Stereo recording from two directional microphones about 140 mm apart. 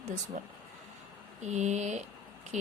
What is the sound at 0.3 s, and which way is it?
A woman's voice, 60° right (ahead or behind).